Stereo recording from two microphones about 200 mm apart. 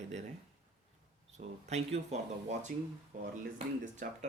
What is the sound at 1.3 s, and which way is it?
Speech, 35° right (ahead or behind).